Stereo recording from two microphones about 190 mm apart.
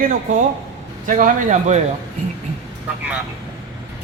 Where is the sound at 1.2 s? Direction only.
45° right (ahead or behind).